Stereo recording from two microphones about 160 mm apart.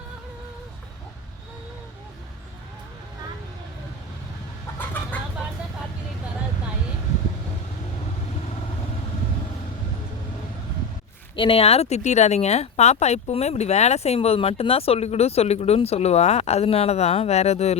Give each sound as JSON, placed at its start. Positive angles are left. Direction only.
{"t": 11.3, "sound": "speech", "side_deg": 35}